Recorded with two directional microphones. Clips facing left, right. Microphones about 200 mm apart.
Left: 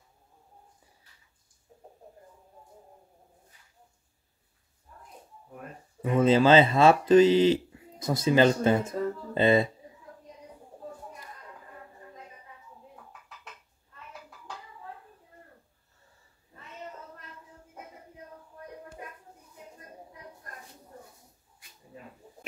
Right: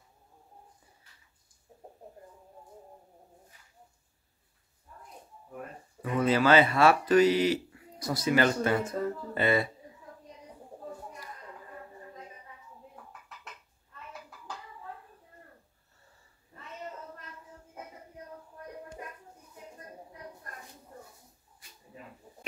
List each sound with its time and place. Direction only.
6.0 s speech: 25° left (ahead or behind)